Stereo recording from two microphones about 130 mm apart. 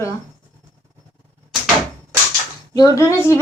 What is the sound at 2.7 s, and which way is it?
Speech, 25° left (ahead or behind).